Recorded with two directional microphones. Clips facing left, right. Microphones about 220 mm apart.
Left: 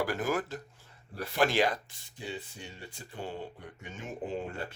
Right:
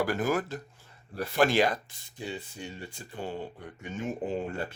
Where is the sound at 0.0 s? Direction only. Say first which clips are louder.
Right 3 dB; 50° right (ahead or behind).